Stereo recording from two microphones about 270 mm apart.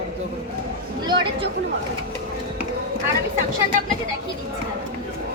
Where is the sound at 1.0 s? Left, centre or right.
Centre.